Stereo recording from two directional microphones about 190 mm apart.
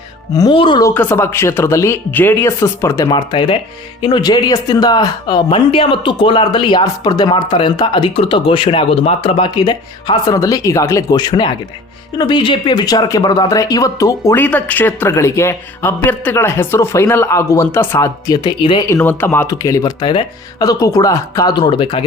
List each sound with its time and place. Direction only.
0.3 s speech: 25° left (ahead or behind)
18.9 s speech: 10° left (ahead or behind); by 22.0 s 25° left (ahead or behind)